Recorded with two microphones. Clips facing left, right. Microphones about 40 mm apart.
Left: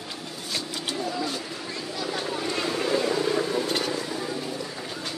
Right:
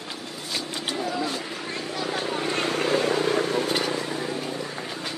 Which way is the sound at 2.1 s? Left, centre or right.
Right.